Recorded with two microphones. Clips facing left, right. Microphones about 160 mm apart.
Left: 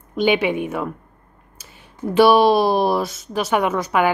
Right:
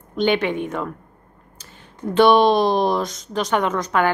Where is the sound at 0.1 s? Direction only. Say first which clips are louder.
Left 1 dB; 10° left (ahead or behind).